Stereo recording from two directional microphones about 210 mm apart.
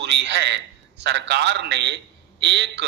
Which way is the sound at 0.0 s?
55° right (ahead or behind).